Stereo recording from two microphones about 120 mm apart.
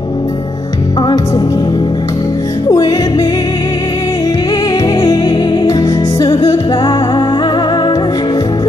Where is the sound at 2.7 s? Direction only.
30° left (ahead or behind).